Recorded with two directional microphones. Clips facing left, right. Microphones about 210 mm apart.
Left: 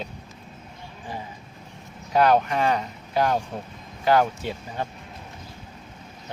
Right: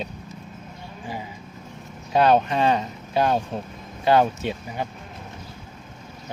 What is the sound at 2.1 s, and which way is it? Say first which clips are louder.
Speech: right 1 dB; 25° right (ahead or behind).